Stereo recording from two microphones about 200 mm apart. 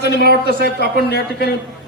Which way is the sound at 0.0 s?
55° left (ahead or behind).